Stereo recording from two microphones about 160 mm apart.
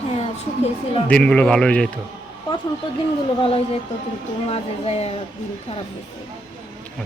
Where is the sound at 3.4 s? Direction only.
35° left (ahead or behind).